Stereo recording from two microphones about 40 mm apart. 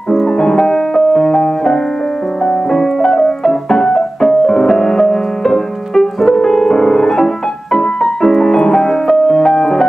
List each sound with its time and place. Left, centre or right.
0.4 s music: centre
2.4 s piano: centre
7.7 s music: centre